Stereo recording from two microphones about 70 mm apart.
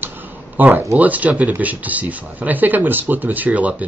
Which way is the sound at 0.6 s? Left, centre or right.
Right.